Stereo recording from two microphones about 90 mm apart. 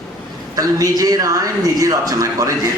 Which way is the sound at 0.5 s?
40° right (ahead or behind).